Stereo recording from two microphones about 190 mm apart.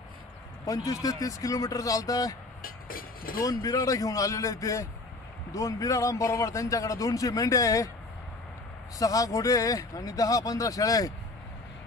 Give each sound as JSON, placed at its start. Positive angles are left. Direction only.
{"t": 0.7, "sound": "a man's voice", "side_deg": 20}
{"t": 2.6, "sound": "vehicle", "side_deg": 50}
{"t": 3.4, "sound": "a man's voice", "side_deg": 15}
{"t": 8.9, "sound": "speech", "side_deg": 20}